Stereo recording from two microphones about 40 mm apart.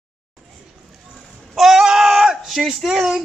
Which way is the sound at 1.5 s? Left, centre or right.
Centre.